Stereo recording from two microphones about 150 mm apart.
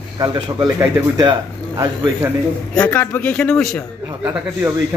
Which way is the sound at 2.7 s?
10° left (ahead or behind).